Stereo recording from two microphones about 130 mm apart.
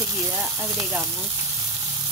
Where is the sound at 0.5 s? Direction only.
20° right (ahead or behind).